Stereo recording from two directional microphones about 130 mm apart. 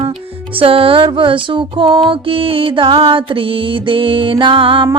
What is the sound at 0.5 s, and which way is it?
Music, 45° right (ahead or behind).